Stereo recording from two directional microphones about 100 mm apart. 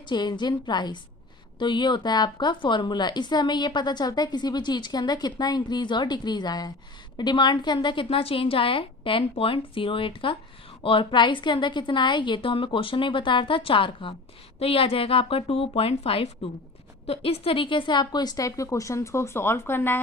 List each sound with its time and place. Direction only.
0.0 s a woman's voice: 50° left (ahead or behind)
14.6 s a woman's voice: 70° left (ahead or behind); by 20.0 s 25° left (ahead or behind)